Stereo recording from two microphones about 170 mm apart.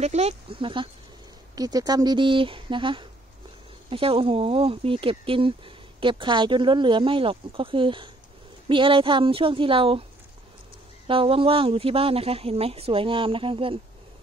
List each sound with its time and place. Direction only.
0.0 s speech: 40° right (ahead or behind)
11.1 s speech: 30° right (ahead or behind)